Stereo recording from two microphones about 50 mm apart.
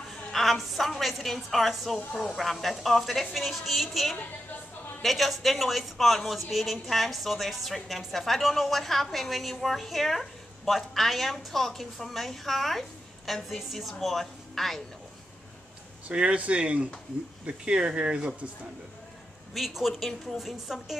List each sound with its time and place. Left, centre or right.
0.3 s a woman's voice: centre
16.1 s speech: right
19.5 s speech: centre